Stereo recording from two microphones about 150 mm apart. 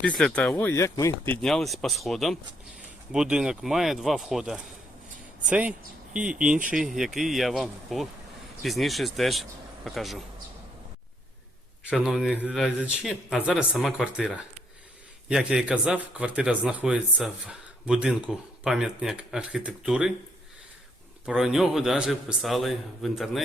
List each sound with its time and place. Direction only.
0.0 s speech: 5° left (ahead or behind)
0.5 s speech: 20° left (ahead or behind)
1.4 s a man's voice: 5° left (ahead or behind)
11.9 s a man's voice: 5° right (ahead or behind)
21.2 s a man's voice: 5° right (ahead or behind)